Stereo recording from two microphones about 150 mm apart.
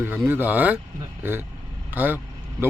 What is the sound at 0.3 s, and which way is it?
Speech, 10° right (ahead or behind).